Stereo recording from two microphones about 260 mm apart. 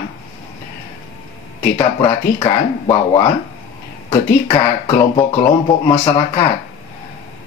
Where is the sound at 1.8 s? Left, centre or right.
Centre.